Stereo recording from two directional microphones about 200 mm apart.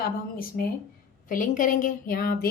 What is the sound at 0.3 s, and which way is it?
A woman's voice, 45° left (ahead or behind).